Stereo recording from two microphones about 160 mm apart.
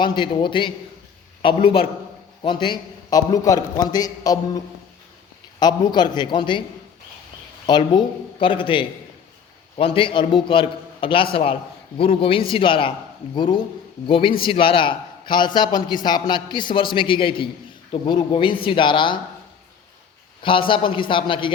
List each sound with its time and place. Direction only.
0.0 s a man's voice: 30° left (ahead or behind)
7.7 s a man's voice: 30° left (ahead or behind)
20.4 s a man's voice: 35° left (ahead or behind)